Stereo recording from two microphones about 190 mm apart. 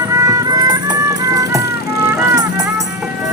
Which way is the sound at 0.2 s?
20° right (ahead or behind).